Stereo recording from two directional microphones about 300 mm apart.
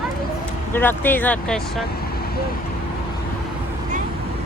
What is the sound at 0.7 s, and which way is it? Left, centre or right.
Speech, centre.